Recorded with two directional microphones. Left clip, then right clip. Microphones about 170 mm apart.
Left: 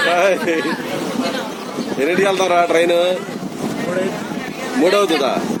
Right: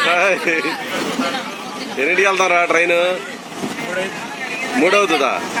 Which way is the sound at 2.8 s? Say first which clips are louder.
Even; 30° left (ahead or behind).